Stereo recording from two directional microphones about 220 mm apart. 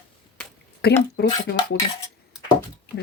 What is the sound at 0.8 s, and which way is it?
Speech, 45° left (ahead or behind).